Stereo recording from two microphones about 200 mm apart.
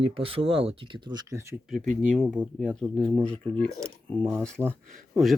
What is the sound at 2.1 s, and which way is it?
Speech, centre (ahead or behind).